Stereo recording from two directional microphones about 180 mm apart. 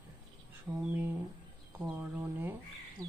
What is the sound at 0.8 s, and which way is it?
A woman's voice, 10° right (ahead or behind).